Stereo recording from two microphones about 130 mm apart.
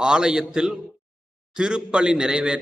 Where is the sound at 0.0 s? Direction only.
5° right (ahead or behind).